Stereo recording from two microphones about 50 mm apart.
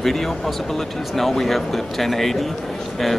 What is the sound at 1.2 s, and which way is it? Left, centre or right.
Speech, centre.